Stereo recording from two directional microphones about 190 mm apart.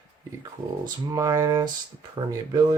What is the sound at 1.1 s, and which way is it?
Speech, 20° right (ahead or behind).